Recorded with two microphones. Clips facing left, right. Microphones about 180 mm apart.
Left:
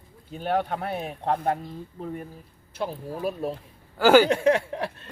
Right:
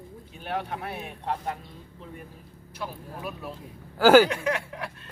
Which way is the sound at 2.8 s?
30° left (ahead or behind).